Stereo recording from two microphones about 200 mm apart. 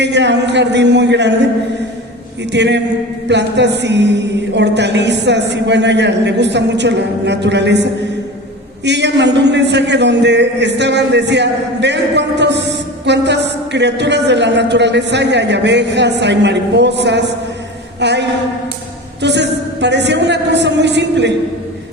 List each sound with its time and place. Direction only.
0.0 s a man's voice: 60° right (ahead or behind)
2.5 s a man's voice: 60° right (ahead or behind)